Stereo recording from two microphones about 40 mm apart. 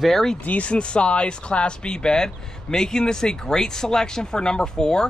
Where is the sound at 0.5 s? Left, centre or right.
Left.